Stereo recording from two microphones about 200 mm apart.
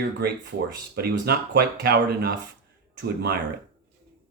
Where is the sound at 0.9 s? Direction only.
55° right (ahead or behind).